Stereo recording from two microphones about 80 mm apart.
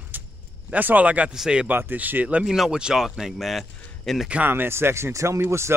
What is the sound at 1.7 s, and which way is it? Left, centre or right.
Speech, right.